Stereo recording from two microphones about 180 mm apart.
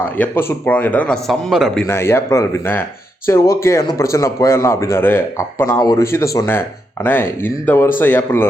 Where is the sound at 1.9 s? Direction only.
15° left (ahead or behind).